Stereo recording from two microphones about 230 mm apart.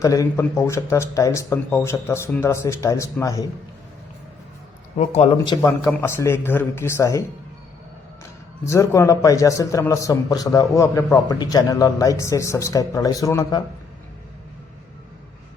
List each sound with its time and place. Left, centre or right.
0.0 s a man's voice: centre
4.9 s a man's voice: left